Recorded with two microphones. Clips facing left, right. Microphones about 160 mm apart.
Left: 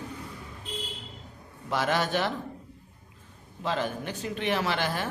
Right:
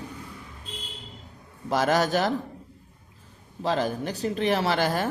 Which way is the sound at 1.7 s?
40° right (ahead or behind).